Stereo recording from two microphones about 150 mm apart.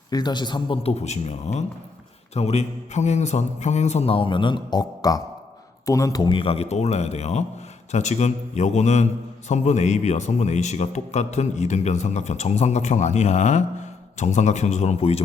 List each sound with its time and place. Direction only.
0.1 s a man's voice: 30° left (ahead or behind); by 15.2 s 45° left (ahead or behind)